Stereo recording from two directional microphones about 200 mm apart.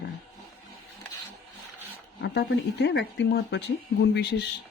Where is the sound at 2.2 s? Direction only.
60° left (ahead or behind).